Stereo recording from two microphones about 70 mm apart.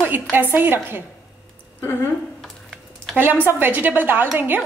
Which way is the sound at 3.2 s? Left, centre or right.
Right.